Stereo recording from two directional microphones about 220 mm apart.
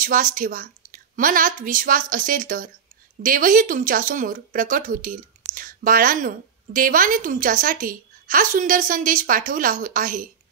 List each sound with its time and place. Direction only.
0.0 s speech: 40° right (ahead or behind)